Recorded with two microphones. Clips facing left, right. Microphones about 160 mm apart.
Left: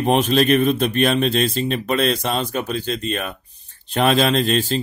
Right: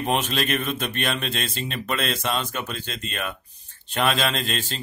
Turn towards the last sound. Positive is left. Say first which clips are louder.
# left 10 dB
turn(degrees=35)  # may be behind; listen again after turning